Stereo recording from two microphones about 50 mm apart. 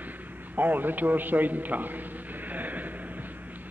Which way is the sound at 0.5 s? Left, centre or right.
Right.